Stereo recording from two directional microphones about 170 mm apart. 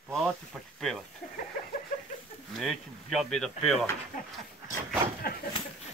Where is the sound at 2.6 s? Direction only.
Centre (ahead or behind).